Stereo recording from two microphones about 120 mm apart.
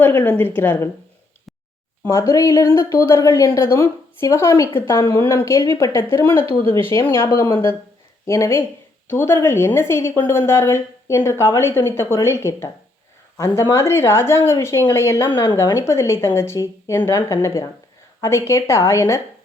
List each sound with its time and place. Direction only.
0.0 s speech: 15° left (ahead or behind)
2.0 s speech: 25° left (ahead or behind)
13.7 s speech: 20° left (ahead or behind)